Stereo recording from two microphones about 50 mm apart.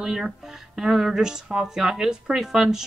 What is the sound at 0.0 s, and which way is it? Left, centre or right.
Speech, centre.